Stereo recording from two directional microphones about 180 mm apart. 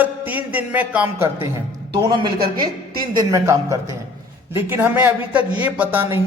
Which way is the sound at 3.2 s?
15° right (ahead or behind).